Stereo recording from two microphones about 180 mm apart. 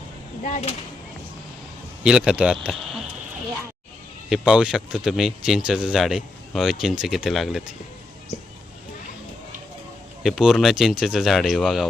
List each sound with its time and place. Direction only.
0.4 s speech: 40° left (ahead or behind)
2.0 s speech: 5° right (ahead or behind)
2.6 s cricket: centre (ahead or behind)
4.3 s speech: 5° right (ahead or behind)
10.2 s speech: 5° right (ahead or behind)